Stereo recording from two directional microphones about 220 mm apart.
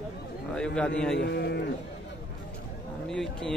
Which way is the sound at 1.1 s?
50° left (ahead or behind).